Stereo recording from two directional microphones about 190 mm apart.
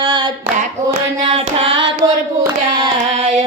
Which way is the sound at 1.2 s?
30° right (ahead or behind).